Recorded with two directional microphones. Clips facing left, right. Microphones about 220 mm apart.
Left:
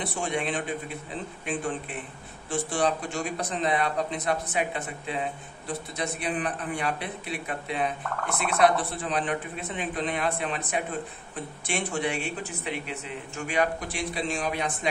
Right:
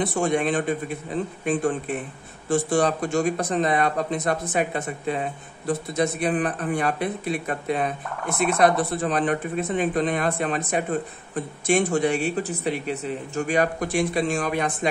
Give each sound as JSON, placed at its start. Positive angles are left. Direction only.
{"t": 0.0, "sound": "speech", "side_deg": -45}